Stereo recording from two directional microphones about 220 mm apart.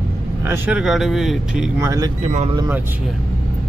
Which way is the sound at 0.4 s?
10° right (ahead or behind).